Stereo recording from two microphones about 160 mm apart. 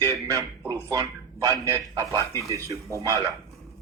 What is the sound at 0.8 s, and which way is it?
A man's voice, 20° right (ahead or behind).